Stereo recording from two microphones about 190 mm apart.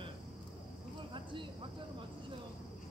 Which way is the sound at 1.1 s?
25° right (ahead or behind).